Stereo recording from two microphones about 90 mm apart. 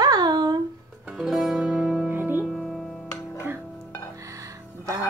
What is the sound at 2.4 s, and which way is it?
Music, centre (ahead or behind).